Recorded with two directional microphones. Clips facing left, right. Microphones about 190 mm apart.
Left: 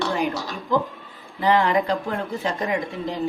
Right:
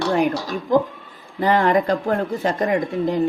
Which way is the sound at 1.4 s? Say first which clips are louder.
Right 2 dB; 45° right (ahead or behind).